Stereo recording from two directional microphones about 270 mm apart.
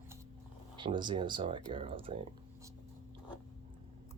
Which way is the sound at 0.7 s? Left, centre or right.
Centre.